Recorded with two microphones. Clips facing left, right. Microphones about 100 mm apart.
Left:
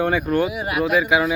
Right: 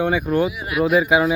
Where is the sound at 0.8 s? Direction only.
30° right (ahead or behind).